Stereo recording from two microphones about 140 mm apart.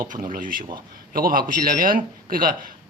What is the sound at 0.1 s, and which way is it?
Speech, 70° right (ahead or behind).